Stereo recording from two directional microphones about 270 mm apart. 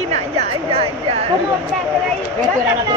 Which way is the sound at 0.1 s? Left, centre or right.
Right.